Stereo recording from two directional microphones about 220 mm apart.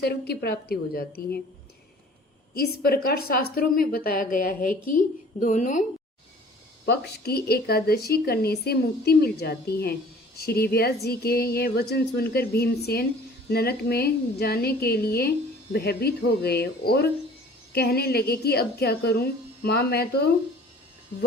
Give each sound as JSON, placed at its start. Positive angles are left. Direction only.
{"t": 0.0, "sound": "speech", "side_deg": 45}
{"t": 2.6, "sound": "a woman's voice", "side_deg": 45}
{"t": 6.8, "sound": "speech", "side_deg": 45}